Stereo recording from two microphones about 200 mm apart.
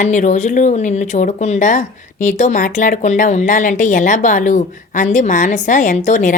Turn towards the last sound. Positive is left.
turn(degrees=40)  # may be behind; listen again after turning